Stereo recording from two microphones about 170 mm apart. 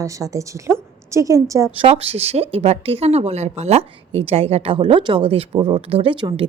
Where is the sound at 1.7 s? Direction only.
35° right (ahead or behind).